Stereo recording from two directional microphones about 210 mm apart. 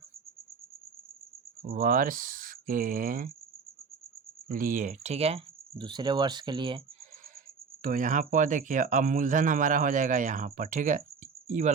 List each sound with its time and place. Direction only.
1.7 s speech: 40° right (ahead or behind)
4.5 s speech: 40° right (ahead or behind); by 6.8 s 25° right (ahead or behind)
7.8 s speech: 40° right (ahead or behind)